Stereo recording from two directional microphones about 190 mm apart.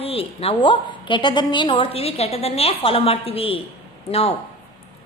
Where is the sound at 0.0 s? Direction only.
30° left (ahead or behind).